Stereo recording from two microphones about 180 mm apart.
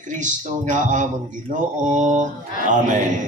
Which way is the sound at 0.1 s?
45° right (ahead or behind).